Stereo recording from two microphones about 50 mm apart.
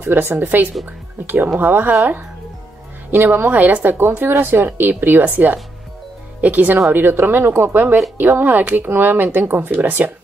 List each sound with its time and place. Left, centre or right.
0.0 s a woman's voice: right
3.3 s a woman's voice: right
6.9 s a woman's voice: right